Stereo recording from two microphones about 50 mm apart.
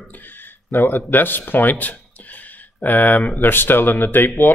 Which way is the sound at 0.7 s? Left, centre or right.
Left.